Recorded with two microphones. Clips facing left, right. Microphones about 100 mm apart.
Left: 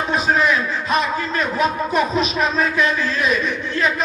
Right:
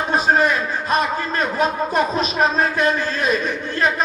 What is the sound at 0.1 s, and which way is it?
A man's voice, 45° right (ahead or behind).